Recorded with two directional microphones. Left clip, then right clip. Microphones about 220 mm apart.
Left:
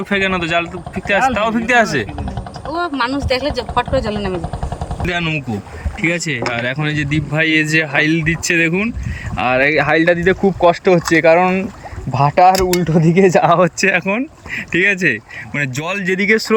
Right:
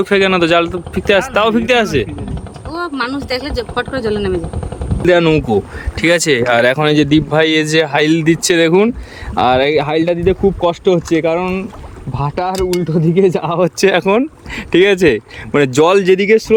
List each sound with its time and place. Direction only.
0.0 s speech: 10° right (ahead or behind)
5.0 s speech: 15° right (ahead or behind)
9.9 s speech: 30° left (ahead or behind)
12.5 s speech: 10° left (ahead or behind)
12.9 s speech: centre (ahead or behind)
13.8 s speech: 10° right (ahead or behind)
16.1 s speech: centre (ahead or behind)